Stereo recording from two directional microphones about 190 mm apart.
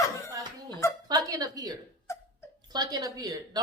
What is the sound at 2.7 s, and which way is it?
Speech, 20° right (ahead or behind).